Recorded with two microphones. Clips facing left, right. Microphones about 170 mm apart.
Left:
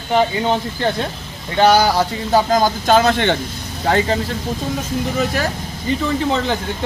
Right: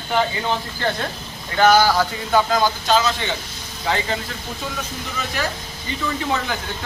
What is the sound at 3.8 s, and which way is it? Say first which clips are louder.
Speech: left 6 dB; 45° left (ahead or behind).